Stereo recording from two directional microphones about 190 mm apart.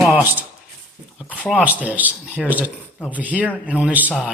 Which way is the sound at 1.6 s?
10° right (ahead or behind).